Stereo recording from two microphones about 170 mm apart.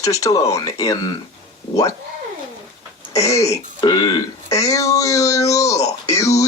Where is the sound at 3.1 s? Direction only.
20° left (ahead or behind).